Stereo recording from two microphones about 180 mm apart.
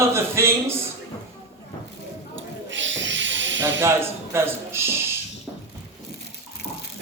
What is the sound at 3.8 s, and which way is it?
A man's voice, 15° right (ahead or behind).